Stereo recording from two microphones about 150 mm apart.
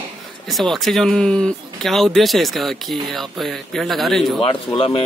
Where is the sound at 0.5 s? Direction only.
Centre (ahead or behind).